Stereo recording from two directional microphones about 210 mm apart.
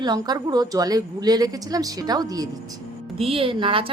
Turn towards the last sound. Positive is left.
turn(degrees=-25)  # may be behind; listen again after turning